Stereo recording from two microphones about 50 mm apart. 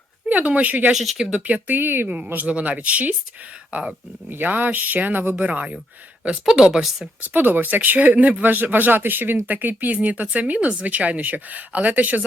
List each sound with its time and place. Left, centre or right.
0.3 s speech: right
0.9 s speech: centre
1.3 s speech: right
2.0 s speech: right
6.4 s speech: centre
7.3 s speech: right